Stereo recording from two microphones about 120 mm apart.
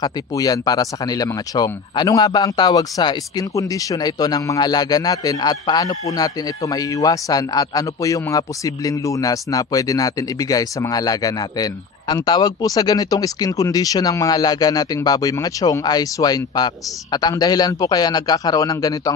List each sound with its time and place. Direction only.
0.0 s speech: 30° left (ahead or behind)